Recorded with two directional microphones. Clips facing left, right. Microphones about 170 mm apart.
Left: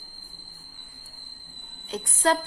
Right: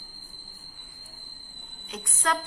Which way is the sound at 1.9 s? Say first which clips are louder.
Left 6 dB; 30° left (ahead or behind).